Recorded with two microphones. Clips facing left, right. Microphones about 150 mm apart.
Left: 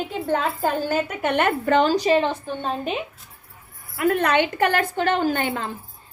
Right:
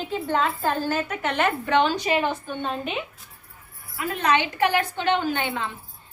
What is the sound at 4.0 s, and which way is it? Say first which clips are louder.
A woman's voice: left 4 dB; 55° left (ahead or behind).